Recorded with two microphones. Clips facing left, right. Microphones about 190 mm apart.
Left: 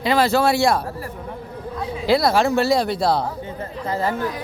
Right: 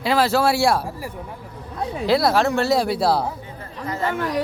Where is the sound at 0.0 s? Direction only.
5° right (ahead or behind).